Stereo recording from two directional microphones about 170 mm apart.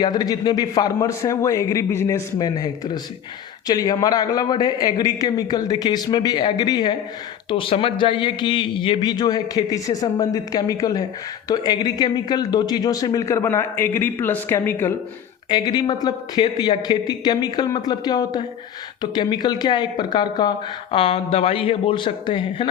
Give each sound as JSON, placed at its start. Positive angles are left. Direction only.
{"t": 0.0, "sound": "speech", "side_deg": 20}
{"t": 15.4, "sound": "speech", "side_deg": 25}